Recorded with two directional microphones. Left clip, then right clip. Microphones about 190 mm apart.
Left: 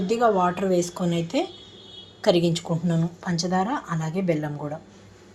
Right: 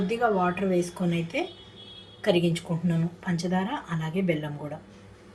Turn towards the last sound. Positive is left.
turn(degrees=25)  # may be behind; listen again after turning